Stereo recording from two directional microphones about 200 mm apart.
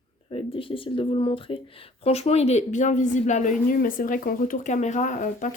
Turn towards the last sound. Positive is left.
turn(degrees=40)  # may be behind; listen again after turning